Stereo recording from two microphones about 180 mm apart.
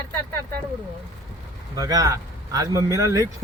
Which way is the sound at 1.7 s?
20° right (ahead or behind).